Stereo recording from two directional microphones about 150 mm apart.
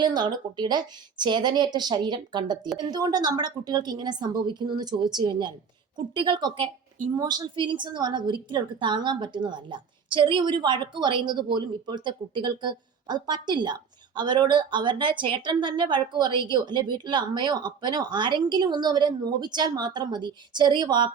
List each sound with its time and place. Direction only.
0.0 s a woman's voice: 30° right (ahead or behind)